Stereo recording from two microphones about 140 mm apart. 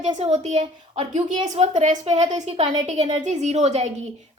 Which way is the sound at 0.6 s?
40° right (ahead or behind).